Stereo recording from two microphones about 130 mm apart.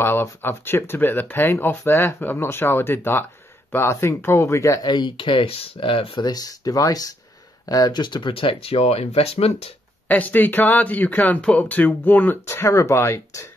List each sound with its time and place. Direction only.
0.0 s speech: 20° left (ahead or behind); by 6.2 s 45° left (ahead or behind)
6.2 s speech: 30° left (ahead or behind); by 9.8 s 50° left (ahead or behind)
10.0 s speech: 15° left (ahead or behind)